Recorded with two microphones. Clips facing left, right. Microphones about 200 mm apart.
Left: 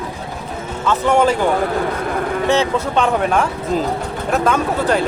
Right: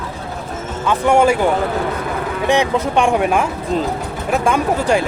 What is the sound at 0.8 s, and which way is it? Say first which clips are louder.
Speech: right 1 dB; 10° right (ahead or behind).